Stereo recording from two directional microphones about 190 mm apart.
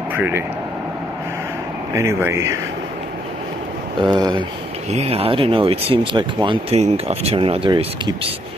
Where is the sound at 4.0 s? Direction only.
25° right (ahead or behind).